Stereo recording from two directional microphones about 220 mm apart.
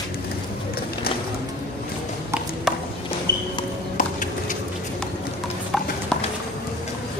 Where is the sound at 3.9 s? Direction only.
35° left (ahead or behind).